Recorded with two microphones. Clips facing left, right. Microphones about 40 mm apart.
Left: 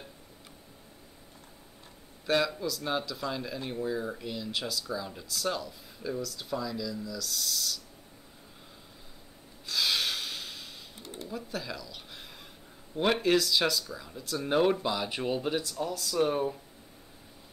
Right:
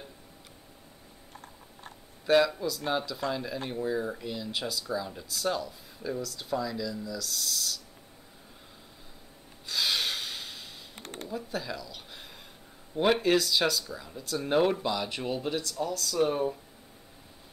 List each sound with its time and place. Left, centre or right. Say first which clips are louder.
2.2 s speech: right 4 dB; centre
9.7 s snort: even; centre
11.0 s a sound: right 2 dB; right
11.2 s speech: right 2 dB; centre